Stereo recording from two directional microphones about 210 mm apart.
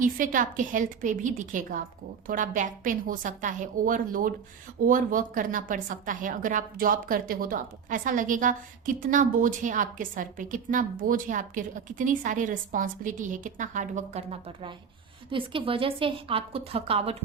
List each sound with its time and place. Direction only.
0.0 s a woman's voice: 40° right (ahead or behind)